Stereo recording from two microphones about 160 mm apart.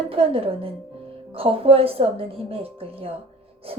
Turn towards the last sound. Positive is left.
turn(degrees=-35)  # may be behind; listen again after turning